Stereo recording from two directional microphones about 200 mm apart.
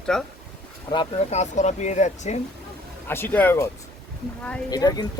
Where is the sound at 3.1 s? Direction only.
10° left (ahead or behind).